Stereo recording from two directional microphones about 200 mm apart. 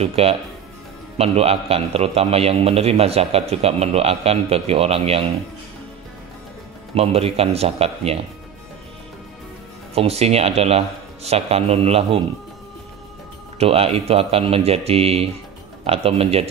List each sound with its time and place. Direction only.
0.0 s a man's voice: 30° right (ahead or behind)
7.0 s a man's voice: 30° right (ahead or behind)
9.9 s a man's voice: 30° right (ahead or behind)
13.6 s a man's voice: 30° right (ahead or behind)